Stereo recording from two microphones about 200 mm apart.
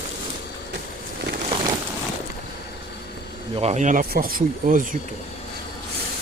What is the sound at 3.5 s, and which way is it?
Speech, 35° right (ahead or behind).